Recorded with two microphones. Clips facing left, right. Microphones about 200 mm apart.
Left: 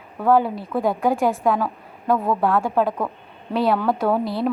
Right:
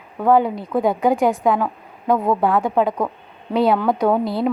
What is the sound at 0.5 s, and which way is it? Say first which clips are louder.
Speech: right 3 dB; 20° right (ahead or behind).